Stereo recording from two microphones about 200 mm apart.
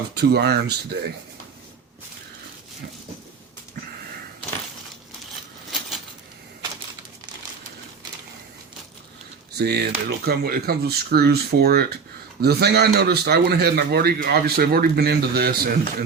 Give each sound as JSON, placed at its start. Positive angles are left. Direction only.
{"t": 0.1, "sound": "speech", "side_deg": -55}
{"t": 9.6, "sound": "a man's voice", "side_deg": -55}